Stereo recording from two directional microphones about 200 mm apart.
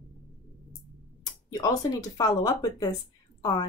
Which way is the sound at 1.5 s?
20° left (ahead or behind).